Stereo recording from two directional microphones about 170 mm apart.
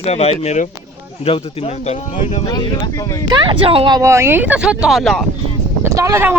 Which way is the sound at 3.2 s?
25° right (ahead or behind).